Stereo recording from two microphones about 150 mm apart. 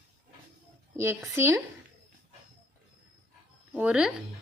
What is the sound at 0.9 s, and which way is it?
Speech, 20° right (ahead or behind).